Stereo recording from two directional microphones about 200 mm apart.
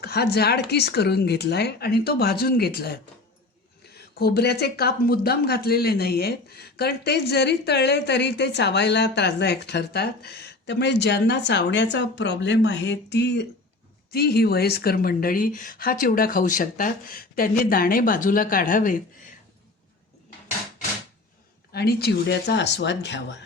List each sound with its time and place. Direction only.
0.0 s speech: 50° left (ahead or behind)
3.9 s speech: 50° left (ahead or behind)
21.7 s speech: 55° left (ahead or behind)